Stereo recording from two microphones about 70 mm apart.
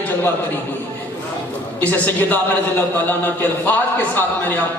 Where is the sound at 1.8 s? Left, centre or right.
Left.